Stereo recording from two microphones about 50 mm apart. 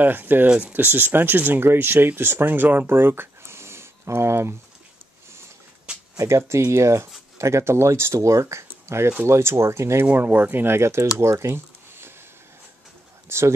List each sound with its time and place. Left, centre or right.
0.0 s speech: right
0.5 s speech: right
0.7 s speech: right
6.1 s speech: right
10.1 s speech: right
11.1 s a sound: right
13.3 s speech: right